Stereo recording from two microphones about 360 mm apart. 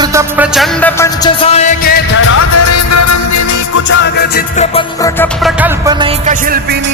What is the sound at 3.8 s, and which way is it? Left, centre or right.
Music, left.